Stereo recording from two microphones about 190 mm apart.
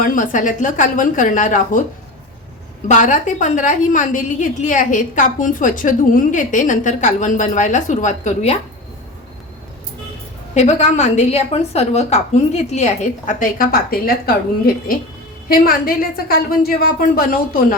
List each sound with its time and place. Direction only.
0.0 s a woman's voice: 45° left (ahead or behind)
2.8 s a woman's voice: 40° left (ahead or behind)
10.5 s a woman's voice: 35° left (ahead or behind); by 14.3 s 50° left (ahead or behind)
15.4 s a woman's voice: 50° left (ahead or behind)